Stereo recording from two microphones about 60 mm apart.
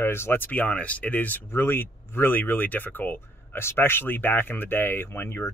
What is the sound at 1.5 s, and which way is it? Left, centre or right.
Speech, left.